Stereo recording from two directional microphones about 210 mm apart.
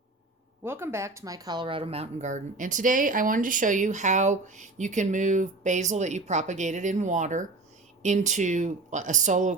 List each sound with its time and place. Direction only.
0.6 s speech: 10° right (ahead or behind); by 9.6 s 35° right (ahead or behind)